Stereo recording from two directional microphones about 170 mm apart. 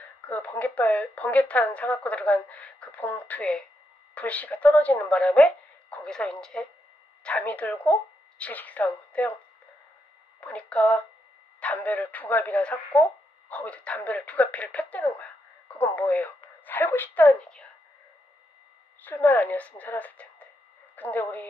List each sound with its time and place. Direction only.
0.0 s speech: 10° left (ahead or behind)
10.4 s speech: 5° left (ahead or behind)
19.0 s speech: 10° left (ahead or behind)